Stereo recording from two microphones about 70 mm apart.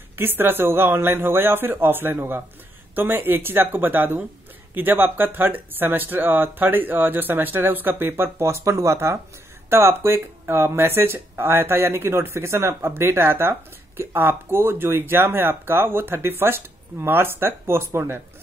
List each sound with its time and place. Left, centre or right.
0.1 s speech: right